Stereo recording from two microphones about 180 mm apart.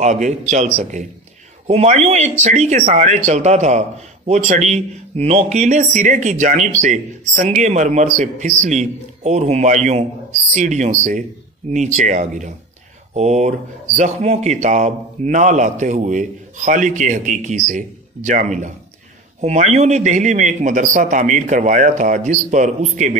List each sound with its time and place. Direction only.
0.0 s speech: 40° right (ahead or behind)